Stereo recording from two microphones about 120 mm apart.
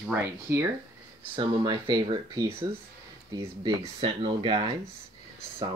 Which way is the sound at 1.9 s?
30° right (ahead or behind).